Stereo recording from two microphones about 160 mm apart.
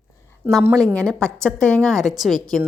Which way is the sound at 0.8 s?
5° left (ahead or behind).